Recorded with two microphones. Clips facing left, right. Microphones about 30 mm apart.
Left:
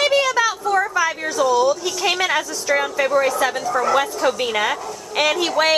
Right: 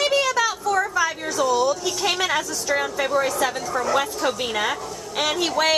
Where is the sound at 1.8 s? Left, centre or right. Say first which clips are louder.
Left 3 dB; centre.